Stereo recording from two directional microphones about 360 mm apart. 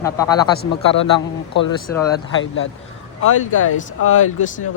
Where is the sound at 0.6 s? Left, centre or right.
Left.